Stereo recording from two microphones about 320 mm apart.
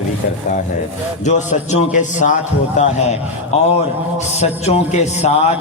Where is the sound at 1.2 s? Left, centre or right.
Left.